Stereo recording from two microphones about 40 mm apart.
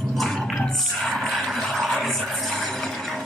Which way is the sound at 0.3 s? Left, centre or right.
Centre.